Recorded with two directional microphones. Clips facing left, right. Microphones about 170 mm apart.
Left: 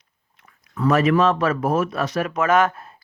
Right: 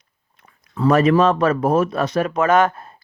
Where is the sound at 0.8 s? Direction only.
30° right (ahead or behind).